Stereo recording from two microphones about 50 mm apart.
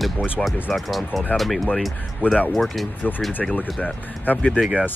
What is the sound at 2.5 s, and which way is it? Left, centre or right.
Speech, centre.